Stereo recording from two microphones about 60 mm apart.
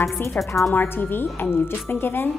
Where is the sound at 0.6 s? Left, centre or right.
Left.